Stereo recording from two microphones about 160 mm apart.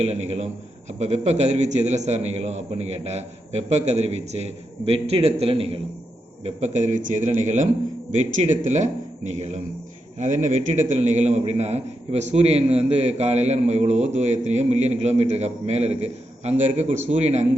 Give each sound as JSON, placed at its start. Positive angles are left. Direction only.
{"t": 0.0, "sound": "a man's voice", "side_deg": -40}
{"t": 6.4, "sound": "a man's voice", "side_deg": -45}